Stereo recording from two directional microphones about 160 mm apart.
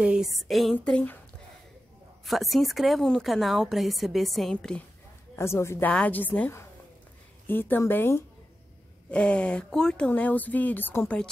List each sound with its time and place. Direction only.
0.0 s a woman's voice: 5° right (ahead or behind)
2.2 s a woman's voice: centre (ahead or behind)
5.3 s speech: 15° left (ahead or behind)